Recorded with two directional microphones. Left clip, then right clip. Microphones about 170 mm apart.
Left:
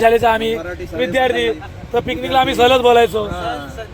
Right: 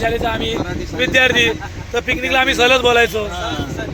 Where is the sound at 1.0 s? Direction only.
20° left (ahead or behind).